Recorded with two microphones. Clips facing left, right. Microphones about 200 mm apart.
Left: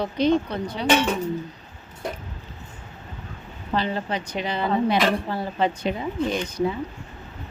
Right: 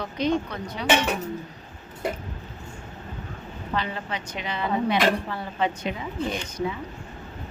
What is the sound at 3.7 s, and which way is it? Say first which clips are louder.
A woman's voice: left 5 dB; 35° left (ahead or behind).